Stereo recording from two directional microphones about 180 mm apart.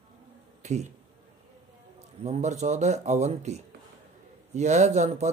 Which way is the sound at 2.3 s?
40° right (ahead or behind).